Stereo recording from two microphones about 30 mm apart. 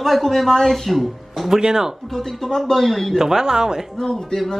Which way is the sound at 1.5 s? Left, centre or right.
Right.